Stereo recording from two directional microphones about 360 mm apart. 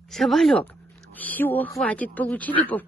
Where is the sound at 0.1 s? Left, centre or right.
Centre.